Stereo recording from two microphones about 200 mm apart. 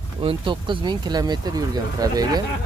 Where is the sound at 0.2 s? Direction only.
25° right (ahead or behind).